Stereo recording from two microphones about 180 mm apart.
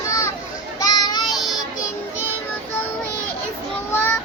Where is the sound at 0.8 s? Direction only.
20° left (ahead or behind).